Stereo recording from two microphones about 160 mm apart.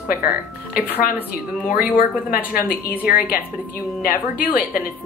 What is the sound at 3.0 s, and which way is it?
A woman's voice, 60° left (ahead or behind).